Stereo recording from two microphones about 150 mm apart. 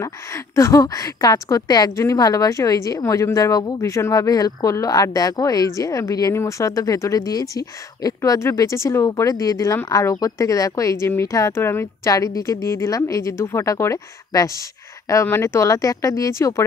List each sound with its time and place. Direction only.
0.0 s a woman's voice: 20° left (ahead or behind)